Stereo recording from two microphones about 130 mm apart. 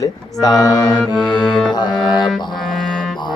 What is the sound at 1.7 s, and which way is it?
Speech, 35° left (ahead or behind).